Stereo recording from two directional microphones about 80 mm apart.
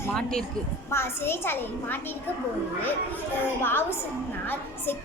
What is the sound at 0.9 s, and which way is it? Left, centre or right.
A woman's voice, left.